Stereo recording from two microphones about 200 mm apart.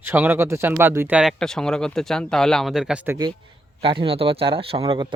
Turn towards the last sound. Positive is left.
turn(degrees=-25)  # may be behind; listen again after turning